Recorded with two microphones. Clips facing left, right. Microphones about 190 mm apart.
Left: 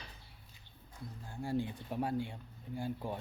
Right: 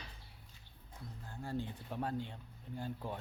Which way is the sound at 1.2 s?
10° left (ahead or behind).